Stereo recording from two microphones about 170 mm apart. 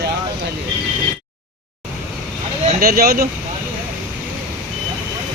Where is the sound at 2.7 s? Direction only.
60° right (ahead or behind).